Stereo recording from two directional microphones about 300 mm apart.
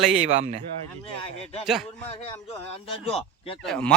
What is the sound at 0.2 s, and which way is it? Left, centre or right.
Speech, right.